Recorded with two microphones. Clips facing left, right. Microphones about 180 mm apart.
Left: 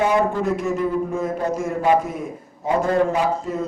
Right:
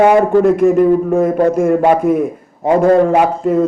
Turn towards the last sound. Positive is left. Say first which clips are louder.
# right 9 dB
turn(degrees=-55)  # may be behind; listen again after turning